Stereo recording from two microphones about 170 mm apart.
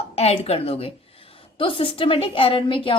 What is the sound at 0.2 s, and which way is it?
A woman's voice, 35° left (ahead or behind).